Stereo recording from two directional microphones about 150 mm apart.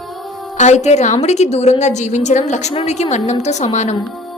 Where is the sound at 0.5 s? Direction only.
50° left (ahead or behind).